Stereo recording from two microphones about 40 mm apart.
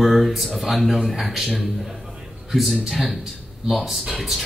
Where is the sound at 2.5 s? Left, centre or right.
Centre.